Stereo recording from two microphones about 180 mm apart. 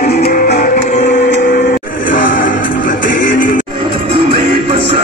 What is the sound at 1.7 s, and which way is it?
Music, 50° left (ahead or behind).